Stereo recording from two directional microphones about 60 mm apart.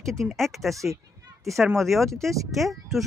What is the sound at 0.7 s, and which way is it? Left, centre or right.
Speech, right.